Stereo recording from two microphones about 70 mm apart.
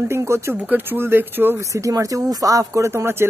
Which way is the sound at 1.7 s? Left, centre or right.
Right.